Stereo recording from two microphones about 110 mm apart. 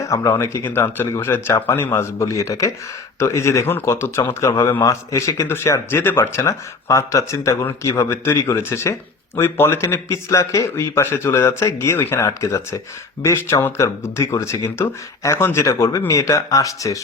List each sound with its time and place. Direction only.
0.1 s speech: 30° left (ahead or behind)